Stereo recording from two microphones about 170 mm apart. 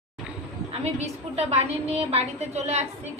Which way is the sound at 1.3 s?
40° right (ahead or behind).